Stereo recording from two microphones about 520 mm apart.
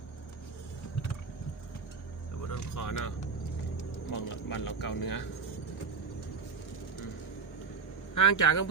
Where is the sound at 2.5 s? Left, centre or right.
Left.